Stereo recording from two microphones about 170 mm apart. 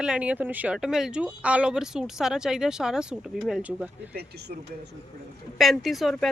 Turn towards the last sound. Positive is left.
turn(degrees=0)  # may be behind; listen again after turning